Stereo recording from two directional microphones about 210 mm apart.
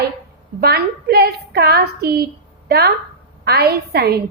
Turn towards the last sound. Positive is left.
turn(degrees=-50)  # may be behind; listen again after turning